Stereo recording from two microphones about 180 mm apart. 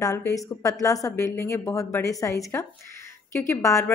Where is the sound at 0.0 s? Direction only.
20° left (ahead or behind).